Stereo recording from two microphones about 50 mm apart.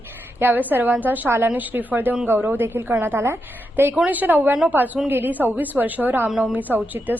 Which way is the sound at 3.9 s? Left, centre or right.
Right.